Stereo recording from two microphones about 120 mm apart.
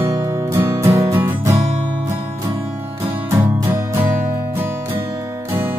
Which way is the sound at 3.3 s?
25° right (ahead or behind).